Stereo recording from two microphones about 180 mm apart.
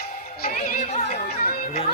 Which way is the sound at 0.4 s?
40° left (ahead or behind).